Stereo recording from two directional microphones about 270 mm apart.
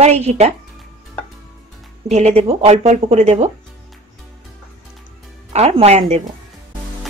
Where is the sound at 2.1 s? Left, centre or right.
Right.